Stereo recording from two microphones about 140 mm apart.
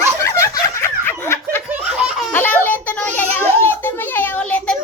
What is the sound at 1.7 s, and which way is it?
Laughter, 10° right (ahead or behind).